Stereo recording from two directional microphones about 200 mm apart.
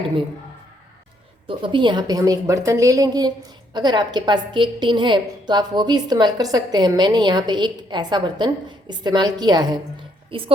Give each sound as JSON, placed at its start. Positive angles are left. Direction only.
{"t": 1.5, "sound": "a woman's voice", "side_deg": -25}